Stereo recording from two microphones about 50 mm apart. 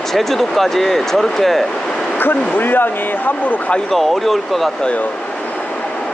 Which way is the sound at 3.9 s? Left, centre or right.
Centre.